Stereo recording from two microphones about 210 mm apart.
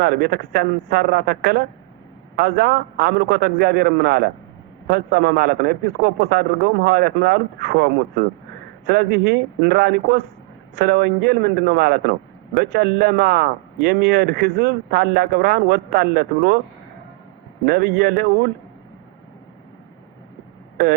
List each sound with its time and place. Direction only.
0.0 s a man's voice: 50° right (ahead or behind)
17.7 s a man's voice: 50° right (ahead or behind)